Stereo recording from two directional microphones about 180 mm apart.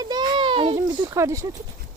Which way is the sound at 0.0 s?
25° right (ahead or behind).